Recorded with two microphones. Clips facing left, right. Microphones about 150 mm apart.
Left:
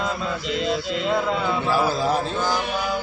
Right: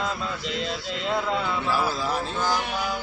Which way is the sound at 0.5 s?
10° left (ahead or behind).